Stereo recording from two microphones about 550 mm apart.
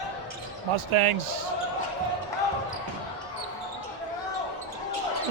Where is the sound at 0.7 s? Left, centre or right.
Right.